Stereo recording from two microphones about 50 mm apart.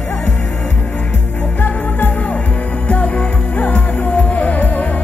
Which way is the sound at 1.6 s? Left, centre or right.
Left.